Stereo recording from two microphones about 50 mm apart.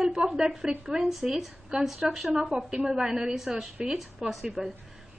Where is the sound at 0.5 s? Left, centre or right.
Centre.